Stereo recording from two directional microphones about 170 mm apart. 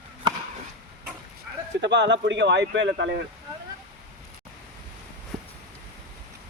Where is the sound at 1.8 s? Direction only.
90° right.